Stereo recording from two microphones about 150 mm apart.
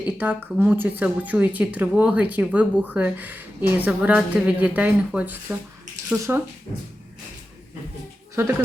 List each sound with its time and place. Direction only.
0.2 s speech: 10° right (ahead or behind)
8.4 s speech: 20° right (ahead or behind)